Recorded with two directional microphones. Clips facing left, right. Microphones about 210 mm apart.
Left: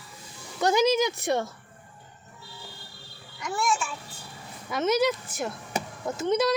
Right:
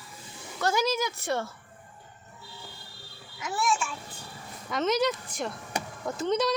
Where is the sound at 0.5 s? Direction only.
20° left (ahead or behind).